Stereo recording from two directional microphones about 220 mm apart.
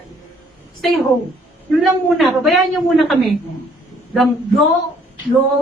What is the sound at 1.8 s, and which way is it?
A man's voice, centre (ahead or behind).